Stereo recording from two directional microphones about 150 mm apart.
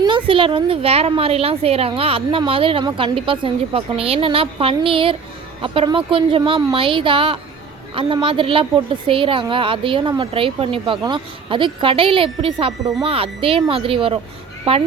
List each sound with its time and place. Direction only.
0.3 s a woman's voice: 35° right (ahead or behind)